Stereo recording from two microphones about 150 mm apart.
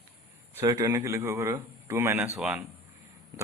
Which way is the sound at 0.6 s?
25° right (ahead or behind).